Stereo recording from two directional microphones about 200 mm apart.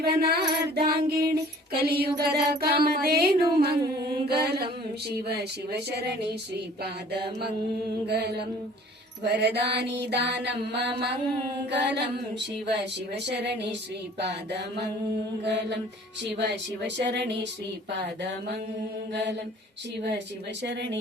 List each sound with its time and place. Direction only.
0.0 s music: 50° right (ahead or behind)
4.1 s mantra: 55° right (ahead or behind)
5.1 s music: 55° right (ahead or behind)
15.4 s music: 60° right (ahead or behind)
20.0 s music: 55° right (ahead or behind)